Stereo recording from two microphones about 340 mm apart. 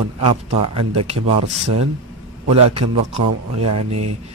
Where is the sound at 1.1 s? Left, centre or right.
Right.